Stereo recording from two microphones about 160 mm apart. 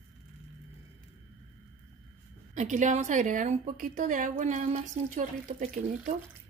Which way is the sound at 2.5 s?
50° right (ahead or behind).